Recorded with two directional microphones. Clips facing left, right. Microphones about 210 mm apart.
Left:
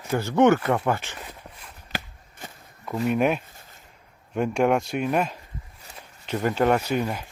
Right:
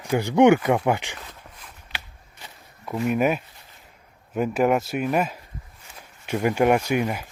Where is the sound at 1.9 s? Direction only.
50° left (ahead or behind).